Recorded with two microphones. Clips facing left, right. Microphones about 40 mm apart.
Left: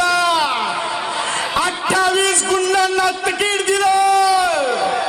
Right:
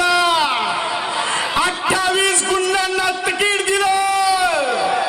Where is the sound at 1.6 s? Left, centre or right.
Right.